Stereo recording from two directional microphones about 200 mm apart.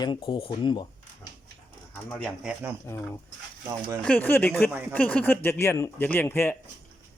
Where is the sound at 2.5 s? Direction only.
10° right (ahead or behind).